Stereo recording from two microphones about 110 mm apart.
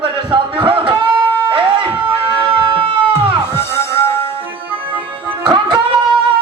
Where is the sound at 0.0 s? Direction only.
50° right (ahead or behind).